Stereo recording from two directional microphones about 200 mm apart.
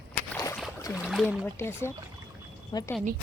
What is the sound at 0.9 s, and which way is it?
Speech, centre (ahead or behind).